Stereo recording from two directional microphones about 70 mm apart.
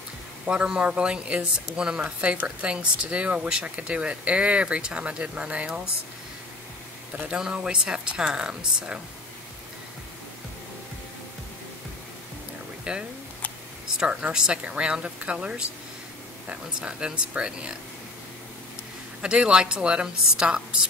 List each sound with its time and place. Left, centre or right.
0.5 s a woman's voice: centre
7.2 s a woman's voice: centre
12.9 s a woman's voice: centre
19.2 s a woman's voice: centre